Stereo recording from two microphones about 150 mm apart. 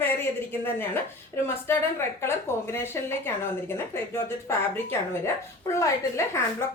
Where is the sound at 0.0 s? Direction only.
15° left (ahead or behind).